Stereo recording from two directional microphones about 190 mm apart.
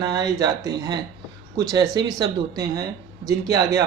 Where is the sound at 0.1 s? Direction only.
20° right (ahead or behind).